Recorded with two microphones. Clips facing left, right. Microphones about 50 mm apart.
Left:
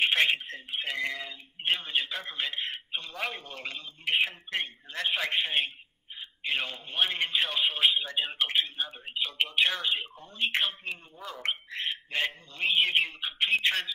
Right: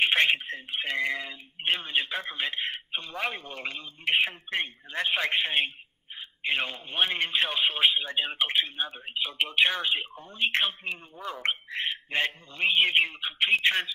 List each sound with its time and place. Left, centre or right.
0.3 s speech: centre
0.9 s a sound: centre
1.7 s speech: centre
9.2 s speech: centre
10.9 s speech: centre
11.3 s speech: centre
12.5 s speech: centre